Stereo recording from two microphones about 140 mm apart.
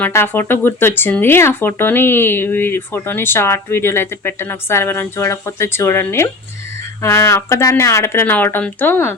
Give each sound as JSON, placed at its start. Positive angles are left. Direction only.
{"t": 0.0, "sound": "speech", "side_deg": 15}